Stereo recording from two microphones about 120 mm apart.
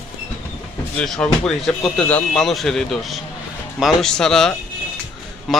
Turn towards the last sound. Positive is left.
turn(degrees=0)  # may be behind; listen again after turning